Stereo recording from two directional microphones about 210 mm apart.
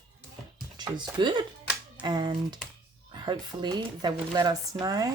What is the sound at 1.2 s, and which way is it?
Speech, 20° right (ahead or behind).